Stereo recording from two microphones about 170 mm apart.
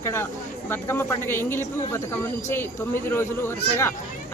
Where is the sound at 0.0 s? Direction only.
15° left (ahead or behind).